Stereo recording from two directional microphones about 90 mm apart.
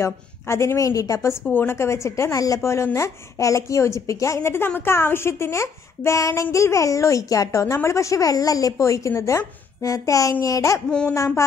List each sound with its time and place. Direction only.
0.0 s speech: 30° left (ahead or behind)
1.5 s speech: 25° left (ahead or behind)
10.9 s speech: 10° left (ahead or behind)
11.1 s speech: 35° left (ahead or behind)